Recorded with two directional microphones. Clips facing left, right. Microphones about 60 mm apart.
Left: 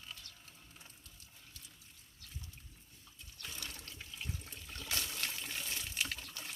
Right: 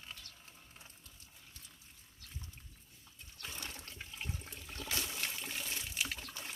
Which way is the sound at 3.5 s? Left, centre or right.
Right.